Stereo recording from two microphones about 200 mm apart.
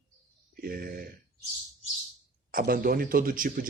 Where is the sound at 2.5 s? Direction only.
45° right (ahead or behind).